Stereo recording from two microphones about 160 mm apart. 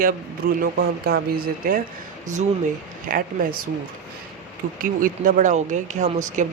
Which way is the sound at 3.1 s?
60° right (ahead or behind).